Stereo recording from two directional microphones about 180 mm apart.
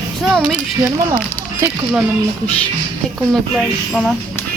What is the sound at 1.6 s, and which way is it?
Speech, 15° right (ahead or behind).